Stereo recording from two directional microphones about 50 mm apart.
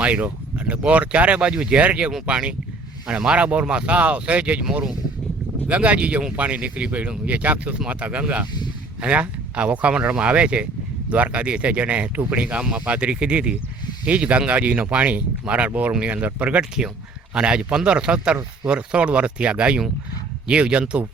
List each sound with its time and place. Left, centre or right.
0.0 s speech: right
5.6 s speech: right